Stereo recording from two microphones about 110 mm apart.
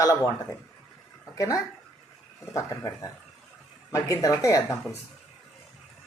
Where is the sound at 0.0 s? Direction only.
30° left (ahead or behind).